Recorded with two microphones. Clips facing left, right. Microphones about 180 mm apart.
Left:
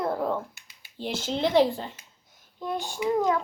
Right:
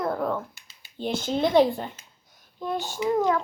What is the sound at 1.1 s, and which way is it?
Speech, 25° left (ahead or behind).